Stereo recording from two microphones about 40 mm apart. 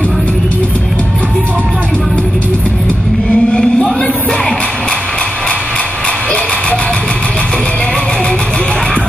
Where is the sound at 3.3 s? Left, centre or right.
Left.